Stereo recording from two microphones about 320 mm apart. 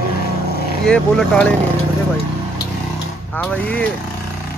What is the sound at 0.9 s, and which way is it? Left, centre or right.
Speech, centre.